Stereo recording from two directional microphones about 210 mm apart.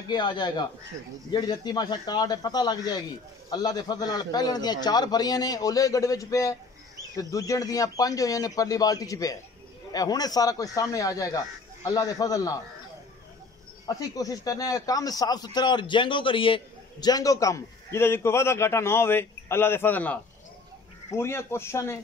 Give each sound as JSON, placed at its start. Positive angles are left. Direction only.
{"t": 0.1, "sound": "a man's voice", "side_deg": 20}
{"t": 13.8, "sound": "speech", "side_deg": 15}